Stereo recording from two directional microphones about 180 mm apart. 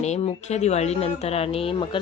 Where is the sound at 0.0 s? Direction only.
35° left (ahead or behind).